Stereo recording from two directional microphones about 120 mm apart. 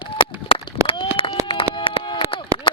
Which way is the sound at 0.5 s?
50° left (ahead or behind).